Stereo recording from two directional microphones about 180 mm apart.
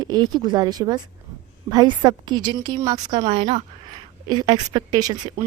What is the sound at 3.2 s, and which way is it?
A woman's voice, 30° right (ahead or behind).